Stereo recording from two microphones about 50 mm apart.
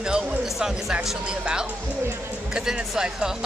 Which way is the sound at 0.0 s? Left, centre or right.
Centre.